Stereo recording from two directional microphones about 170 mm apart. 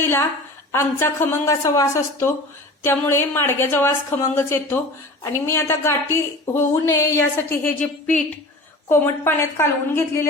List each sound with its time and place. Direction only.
0.0 s a woman's voice: 10° left (ahead or behind)